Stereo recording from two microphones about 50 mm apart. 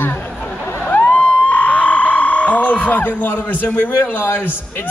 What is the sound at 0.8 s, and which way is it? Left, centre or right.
Vehicle, left.